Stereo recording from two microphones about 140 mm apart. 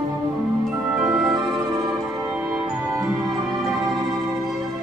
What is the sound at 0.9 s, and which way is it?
Music, centre (ahead or behind).